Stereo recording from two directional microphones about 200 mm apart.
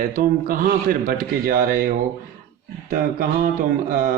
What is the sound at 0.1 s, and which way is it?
A man's voice, 45° right (ahead or behind).